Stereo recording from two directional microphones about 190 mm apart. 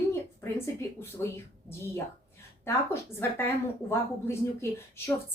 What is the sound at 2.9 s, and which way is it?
A woman's voice, 10° left (ahead or behind).